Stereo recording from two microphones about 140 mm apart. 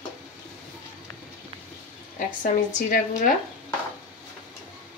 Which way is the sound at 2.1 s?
70° left (ahead or behind).